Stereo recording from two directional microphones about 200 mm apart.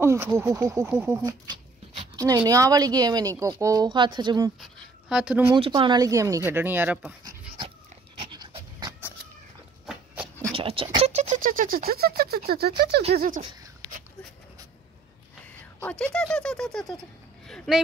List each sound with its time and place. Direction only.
0.0 s speech: 15° right (ahead or behind)
5.1 s speech: 5° right (ahead or behind)
5.5 s speech: 25° right (ahead or behind); by 7.2 s 5° right (ahead or behind)
8.2 s dog: 25° right (ahead or behind)
10.5 s speech: 30° right (ahead or behind); by 13.4 s 45° right (ahead or behind)
15.8 s speech: 5° left (ahead or behind)
17.5 s a sound: centre (ahead or behind)